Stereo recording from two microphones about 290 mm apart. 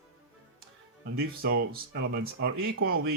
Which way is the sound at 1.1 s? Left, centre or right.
Right.